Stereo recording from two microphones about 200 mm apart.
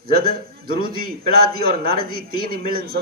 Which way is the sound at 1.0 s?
45° right (ahead or behind).